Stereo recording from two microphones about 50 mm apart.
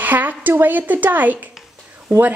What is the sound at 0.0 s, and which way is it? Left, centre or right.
A woman's voice, right.